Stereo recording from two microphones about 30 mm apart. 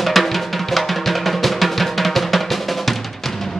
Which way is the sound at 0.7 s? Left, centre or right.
Centre.